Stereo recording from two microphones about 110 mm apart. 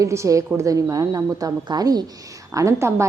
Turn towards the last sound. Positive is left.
turn(degrees=-25)  # may be behind; listen again after turning